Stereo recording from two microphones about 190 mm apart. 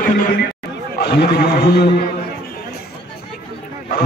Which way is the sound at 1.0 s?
55° left (ahead or behind).